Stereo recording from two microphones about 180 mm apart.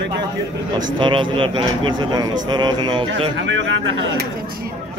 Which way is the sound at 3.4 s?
90° right.